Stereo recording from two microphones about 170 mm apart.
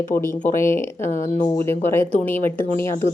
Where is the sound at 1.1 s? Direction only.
45° left (ahead or behind).